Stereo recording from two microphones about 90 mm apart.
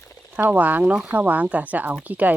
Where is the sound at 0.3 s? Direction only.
20° right (ahead or behind).